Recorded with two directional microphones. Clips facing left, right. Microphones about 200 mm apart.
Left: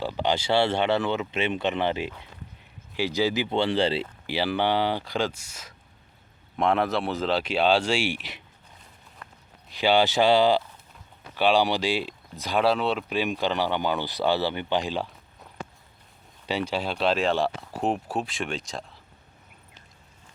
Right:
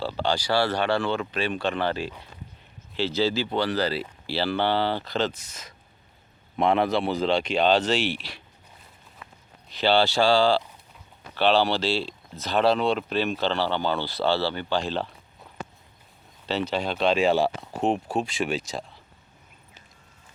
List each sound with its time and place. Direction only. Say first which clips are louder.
0.0 s speech: even; 15° left (ahead or behind)
4.3 s speech: even; 15° left (ahead or behind)
9.2 s a sound: even; 5° right (ahead or behind)
9.7 s speech: even; 15° left (ahead or behind)
16.5 s speech: right 1 dB; 10° left (ahead or behind)